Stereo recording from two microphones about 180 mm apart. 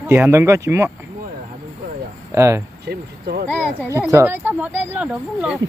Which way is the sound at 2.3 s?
15° right (ahead or behind).